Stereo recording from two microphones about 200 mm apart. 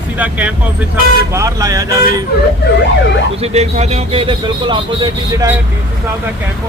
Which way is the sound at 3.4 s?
30° right (ahead or behind).